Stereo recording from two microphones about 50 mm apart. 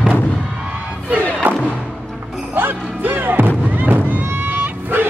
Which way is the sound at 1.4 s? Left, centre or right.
Right.